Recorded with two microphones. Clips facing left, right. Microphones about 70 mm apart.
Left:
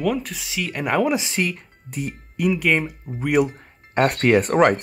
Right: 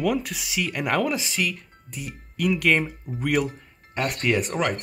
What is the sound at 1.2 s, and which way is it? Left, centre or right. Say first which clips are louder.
Speech: left 3 dB; left.